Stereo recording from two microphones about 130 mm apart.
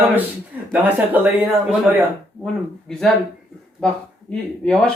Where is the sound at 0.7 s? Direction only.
15° right (ahead or behind).